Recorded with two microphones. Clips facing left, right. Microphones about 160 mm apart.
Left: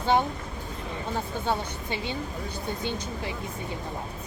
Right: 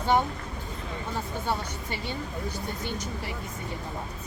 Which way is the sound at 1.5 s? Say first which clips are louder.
Left 3 dB; 20° left (ahead or behind).